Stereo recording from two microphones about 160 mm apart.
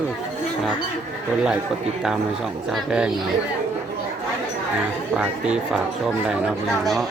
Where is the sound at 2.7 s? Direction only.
5° right (ahead or behind).